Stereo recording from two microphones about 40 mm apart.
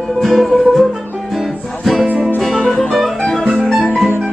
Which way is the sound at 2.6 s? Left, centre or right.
Left.